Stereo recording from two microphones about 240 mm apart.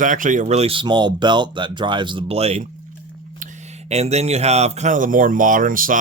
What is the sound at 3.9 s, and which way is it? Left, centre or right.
Speech, right.